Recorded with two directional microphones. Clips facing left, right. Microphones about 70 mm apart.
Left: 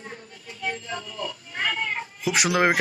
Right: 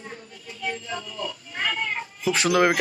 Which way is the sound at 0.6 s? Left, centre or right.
Left.